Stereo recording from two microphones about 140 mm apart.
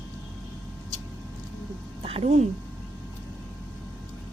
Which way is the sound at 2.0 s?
45° right (ahead or behind).